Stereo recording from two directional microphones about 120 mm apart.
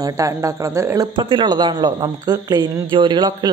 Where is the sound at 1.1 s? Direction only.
40° right (ahead or behind).